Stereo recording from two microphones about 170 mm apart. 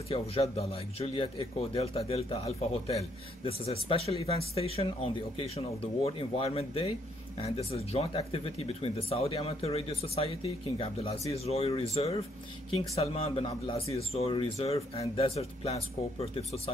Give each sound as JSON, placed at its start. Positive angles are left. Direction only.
{"t": 0.1, "sound": "speech", "side_deg": 35}